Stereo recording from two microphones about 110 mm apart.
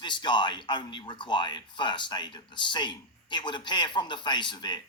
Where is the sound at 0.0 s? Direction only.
45° left (ahead or behind).